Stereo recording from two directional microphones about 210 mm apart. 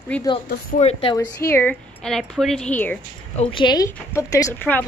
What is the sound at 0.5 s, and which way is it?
Speech, 45° left (ahead or behind).